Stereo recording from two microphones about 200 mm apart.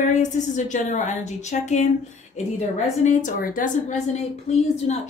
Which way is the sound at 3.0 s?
40° left (ahead or behind).